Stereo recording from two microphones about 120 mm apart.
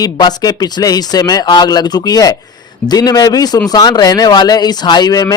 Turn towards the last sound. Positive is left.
turn(degrees=30)  # may be behind; listen again after turning